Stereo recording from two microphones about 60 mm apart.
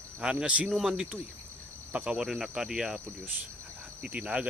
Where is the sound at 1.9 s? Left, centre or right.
Right.